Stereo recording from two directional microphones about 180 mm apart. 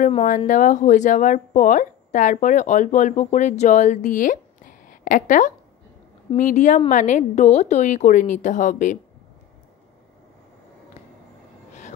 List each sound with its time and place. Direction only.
0.1 s a woman's voice: 40° left (ahead or behind)